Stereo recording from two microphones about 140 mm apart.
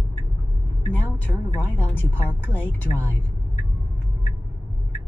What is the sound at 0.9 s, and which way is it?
A woman's voice, 15° left (ahead or behind).